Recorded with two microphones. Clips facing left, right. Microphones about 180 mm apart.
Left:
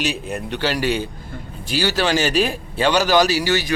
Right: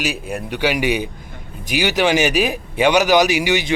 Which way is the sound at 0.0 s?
5° right (ahead or behind).